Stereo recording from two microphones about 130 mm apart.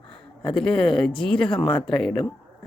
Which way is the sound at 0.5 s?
5° left (ahead or behind).